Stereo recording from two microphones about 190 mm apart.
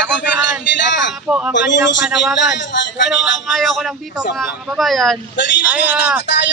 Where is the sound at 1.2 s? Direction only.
5° right (ahead or behind).